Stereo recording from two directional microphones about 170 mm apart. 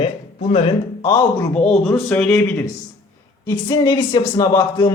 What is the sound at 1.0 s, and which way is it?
Speech, 20° left (ahead or behind).